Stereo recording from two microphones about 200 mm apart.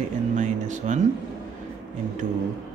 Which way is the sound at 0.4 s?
40° right (ahead or behind).